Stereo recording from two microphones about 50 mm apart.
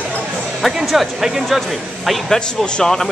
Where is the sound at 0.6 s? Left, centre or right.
Centre.